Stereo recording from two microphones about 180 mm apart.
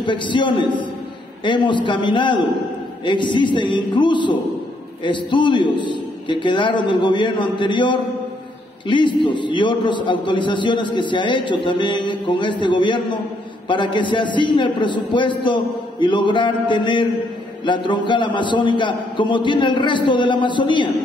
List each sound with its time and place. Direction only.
0.0 s a man's voice: 25° left (ahead or behind)